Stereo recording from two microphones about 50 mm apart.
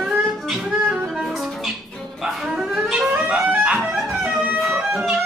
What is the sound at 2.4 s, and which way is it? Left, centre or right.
Music, centre.